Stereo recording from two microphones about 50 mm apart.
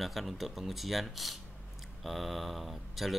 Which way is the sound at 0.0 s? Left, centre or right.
Centre.